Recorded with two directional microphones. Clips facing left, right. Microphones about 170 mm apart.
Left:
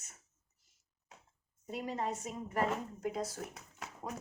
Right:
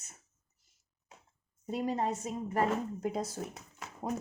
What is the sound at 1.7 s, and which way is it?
Speech, 35° right (ahead or behind).